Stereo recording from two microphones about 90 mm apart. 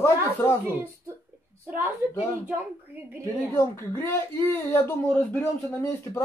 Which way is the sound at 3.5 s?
30° left (ahead or behind).